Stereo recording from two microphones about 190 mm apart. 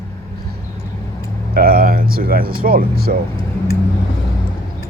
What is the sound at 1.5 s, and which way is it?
Speech, 50° right (ahead or behind).